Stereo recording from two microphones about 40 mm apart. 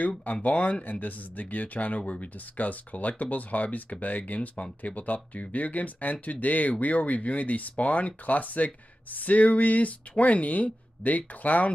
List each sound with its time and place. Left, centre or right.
0.2 s speech: left